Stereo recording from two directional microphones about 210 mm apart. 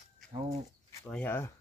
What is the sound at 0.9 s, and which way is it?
Speech, 10° left (ahead or behind).